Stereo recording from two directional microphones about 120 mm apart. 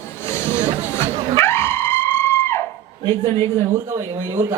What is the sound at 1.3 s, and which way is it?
Music, 20° left (ahead or behind).